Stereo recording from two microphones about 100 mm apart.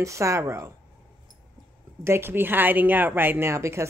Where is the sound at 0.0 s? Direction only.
30° right (ahead or behind).